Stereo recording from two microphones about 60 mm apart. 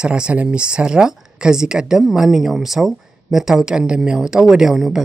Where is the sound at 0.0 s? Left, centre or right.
Centre.